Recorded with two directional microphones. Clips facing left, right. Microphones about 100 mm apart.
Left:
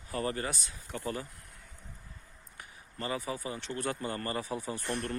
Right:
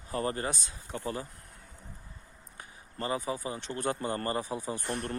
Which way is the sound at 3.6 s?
30° right (ahead or behind).